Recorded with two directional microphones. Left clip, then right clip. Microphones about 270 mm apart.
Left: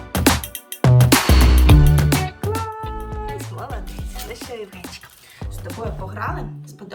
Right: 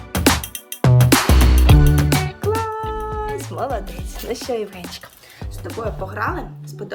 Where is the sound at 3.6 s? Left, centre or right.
Right.